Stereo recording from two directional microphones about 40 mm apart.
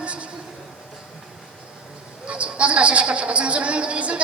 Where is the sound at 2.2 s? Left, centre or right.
Right.